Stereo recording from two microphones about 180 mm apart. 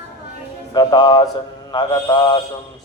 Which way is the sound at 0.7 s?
25° left (ahead or behind).